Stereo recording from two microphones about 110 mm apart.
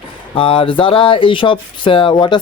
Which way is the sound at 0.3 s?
55° left (ahead or behind).